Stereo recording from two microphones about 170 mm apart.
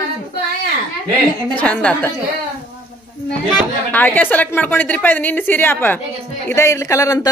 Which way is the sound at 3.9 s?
10° left (ahead or behind).